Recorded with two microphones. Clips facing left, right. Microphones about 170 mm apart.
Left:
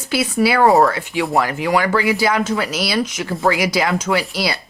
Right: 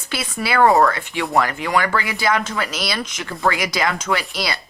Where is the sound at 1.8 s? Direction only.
10° left (ahead or behind).